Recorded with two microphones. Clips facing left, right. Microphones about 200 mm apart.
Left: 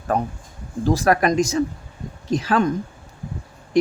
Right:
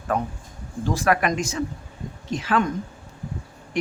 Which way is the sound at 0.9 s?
40° left (ahead or behind).